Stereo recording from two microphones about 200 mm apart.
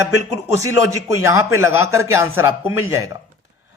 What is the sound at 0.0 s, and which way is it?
Speech, 15° right (ahead or behind).